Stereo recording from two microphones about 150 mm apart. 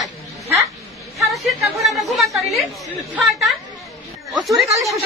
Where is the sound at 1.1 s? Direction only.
Centre (ahead or behind).